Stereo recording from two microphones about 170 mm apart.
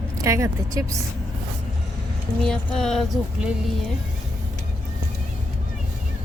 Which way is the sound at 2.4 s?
5° left (ahead or behind).